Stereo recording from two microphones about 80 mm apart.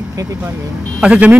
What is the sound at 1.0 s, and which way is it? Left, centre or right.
Speech, centre.